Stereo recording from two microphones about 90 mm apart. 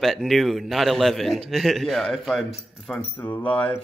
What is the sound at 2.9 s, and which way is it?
Speech, 15° left (ahead or behind).